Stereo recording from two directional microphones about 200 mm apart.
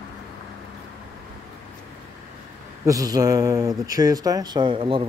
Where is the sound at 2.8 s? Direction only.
15° right (ahead or behind).